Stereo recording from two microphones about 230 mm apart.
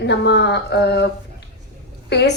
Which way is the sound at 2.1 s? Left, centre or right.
Left.